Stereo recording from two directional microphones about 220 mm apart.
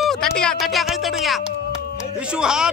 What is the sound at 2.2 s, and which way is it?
Speech, 5° right (ahead or behind).